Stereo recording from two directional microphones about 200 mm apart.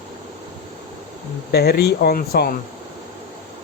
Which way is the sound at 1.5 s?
55° left (ahead or behind).